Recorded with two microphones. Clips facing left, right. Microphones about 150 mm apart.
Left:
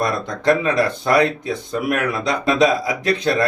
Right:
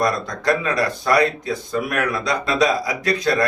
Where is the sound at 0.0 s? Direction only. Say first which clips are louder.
Left 1 dB; 25° left (ahead or behind).